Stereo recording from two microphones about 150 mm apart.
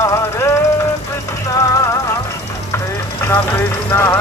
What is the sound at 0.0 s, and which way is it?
Music, 20° left (ahead or behind).